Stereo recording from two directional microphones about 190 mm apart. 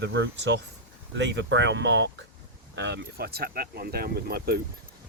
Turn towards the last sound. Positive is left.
turn(degrees=-55)  # may be behind; listen again after turning